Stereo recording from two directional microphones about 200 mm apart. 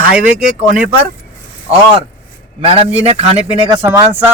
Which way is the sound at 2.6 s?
30° right (ahead or behind).